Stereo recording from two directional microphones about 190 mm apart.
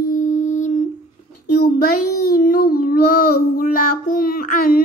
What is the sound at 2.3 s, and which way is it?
Child singing, 45° left (ahead or behind).